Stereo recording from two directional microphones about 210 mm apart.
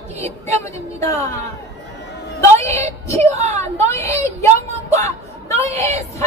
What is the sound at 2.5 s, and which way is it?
Child singing, 30° right (ahead or behind).